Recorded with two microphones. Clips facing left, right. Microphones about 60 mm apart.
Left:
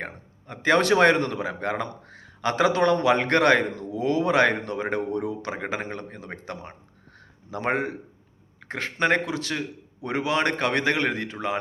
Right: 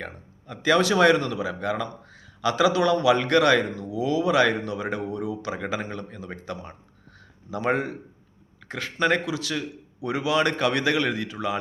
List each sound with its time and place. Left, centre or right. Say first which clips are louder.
0.0 s speech: left 1 dB; left